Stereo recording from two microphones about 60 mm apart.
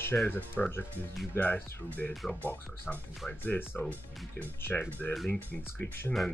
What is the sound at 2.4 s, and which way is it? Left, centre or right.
Speech, left.